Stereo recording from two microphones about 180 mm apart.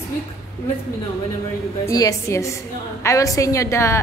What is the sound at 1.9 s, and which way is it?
A woman's voice, 20° left (ahead or behind).